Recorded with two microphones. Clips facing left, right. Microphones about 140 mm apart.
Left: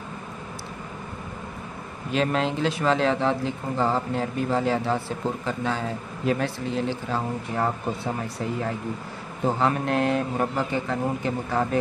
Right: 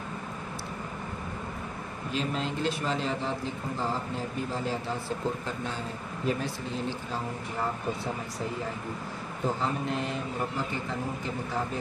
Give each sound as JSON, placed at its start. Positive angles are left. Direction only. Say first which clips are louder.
{"t": 2.1, "sound": "a man's voice", "louder": "left 8 dB", "side_deg": 85}
{"t": 5.7, "sound": "a man's voice", "louder": "left 7 dB", "side_deg": 90}
{"t": 7.1, "sound": "speech", "louder": "left 6 dB", "side_deg": 75}
{"t": 9.6, "sound": "speech", "louder": "left 7 dB", "side_deg": 70}